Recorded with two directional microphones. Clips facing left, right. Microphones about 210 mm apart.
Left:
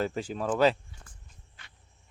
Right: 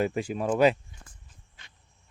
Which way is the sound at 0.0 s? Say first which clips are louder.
Right 3 dB; 10° right (ahead or behind).